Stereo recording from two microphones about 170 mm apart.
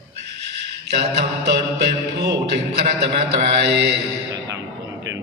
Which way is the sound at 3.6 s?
85° right.